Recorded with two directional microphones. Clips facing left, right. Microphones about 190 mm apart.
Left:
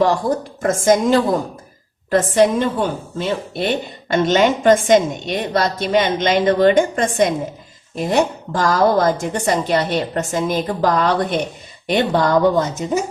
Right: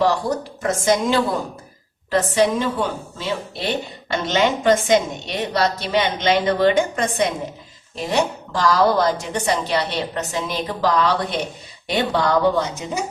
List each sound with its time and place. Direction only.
0.0 s a woman's voice: 50° left (ahead or behind)